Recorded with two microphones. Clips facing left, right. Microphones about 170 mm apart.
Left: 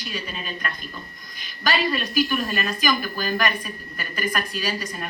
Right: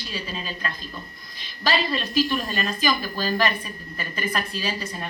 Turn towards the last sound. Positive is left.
turn(degrees=-25)  # may be behind; listen again after turning